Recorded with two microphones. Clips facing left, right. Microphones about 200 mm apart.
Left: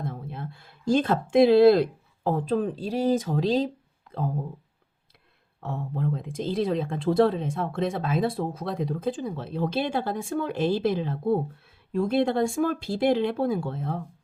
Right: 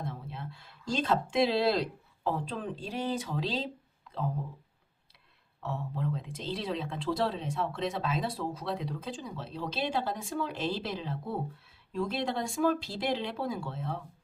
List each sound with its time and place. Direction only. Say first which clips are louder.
0.0 s speech: left 5 dB; 55° left (ahead or behind)
5.6 s speech: left 5 dB; 50° left (ahead or behind)